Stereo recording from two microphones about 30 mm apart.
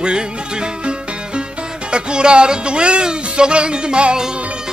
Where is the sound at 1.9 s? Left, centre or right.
Right.